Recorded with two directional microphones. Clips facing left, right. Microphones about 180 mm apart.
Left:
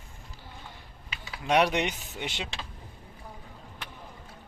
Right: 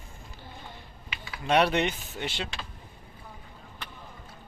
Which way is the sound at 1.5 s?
15° left (ahead or behind).